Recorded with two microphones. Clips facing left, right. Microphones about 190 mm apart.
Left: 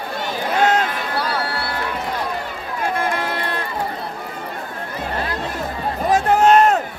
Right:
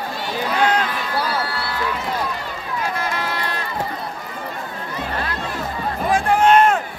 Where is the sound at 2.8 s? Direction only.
50° left (ahead or behind).